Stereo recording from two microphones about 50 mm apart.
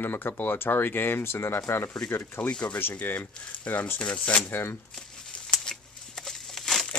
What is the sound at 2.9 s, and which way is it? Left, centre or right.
Speech, left.